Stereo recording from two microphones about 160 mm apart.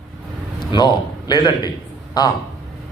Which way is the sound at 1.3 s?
25° left (ahead or behind).